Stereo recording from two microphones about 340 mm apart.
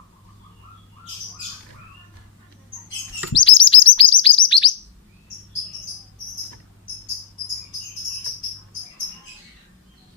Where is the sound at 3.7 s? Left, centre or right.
Centre.